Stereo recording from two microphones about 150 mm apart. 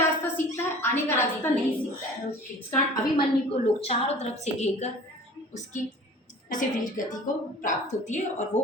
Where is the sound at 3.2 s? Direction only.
40° left (ahead or behind).